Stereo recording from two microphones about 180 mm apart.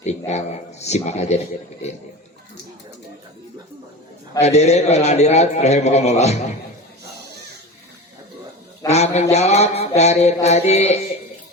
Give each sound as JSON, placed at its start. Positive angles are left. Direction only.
{"t": 0.3, "sound": "mantra", "side_deg": 35}
{"t": 4.4, "sound": "mantra", "side_deg": 35}
{"t": 8.9, "sound": "mantra", "side_deg": 35}